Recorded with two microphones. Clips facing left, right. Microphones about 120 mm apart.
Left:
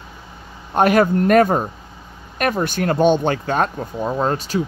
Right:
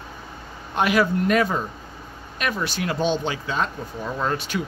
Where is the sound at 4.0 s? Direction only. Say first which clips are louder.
Left 6 dB; 35° left (ahead or behind).